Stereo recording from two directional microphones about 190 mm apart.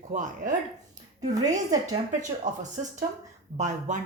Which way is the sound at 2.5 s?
40° right (ahead or behind).